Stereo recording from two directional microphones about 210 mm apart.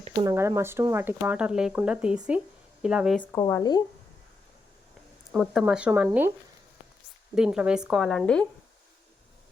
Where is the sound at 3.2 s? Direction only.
10° left (ahead or behind).